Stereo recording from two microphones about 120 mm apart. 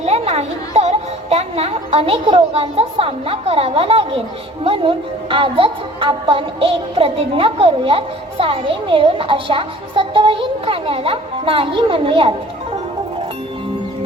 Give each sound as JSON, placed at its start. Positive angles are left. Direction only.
{"t": 0.0, "sound": "music", "side_deg": -60}
{"t": 4.6, "sound": "a woman's voice", "side_deg": -50}